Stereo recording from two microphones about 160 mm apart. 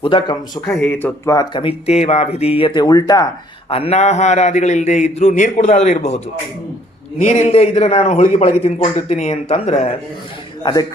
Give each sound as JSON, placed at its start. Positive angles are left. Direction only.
{"t": 0.0, "sound": "a man's voice", "side_deg": 30}
{"t": 0.7, "sound": "speech", "side_deg": 10}
{"t": 1.5, "sound": "speech", "side_deg": 35}
{"t": 3.7, "sound": "a man's voice", "side_deg": 40}
{"t": 10.6, "sound": "speech", "side_deg": 25}